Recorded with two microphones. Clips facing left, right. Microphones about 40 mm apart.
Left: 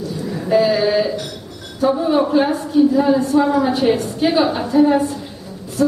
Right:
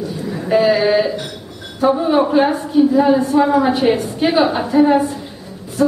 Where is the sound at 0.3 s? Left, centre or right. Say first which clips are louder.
Right 1 dB; centre.